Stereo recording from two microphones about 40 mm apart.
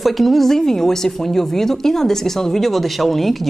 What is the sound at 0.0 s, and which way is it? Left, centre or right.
Speech, centre.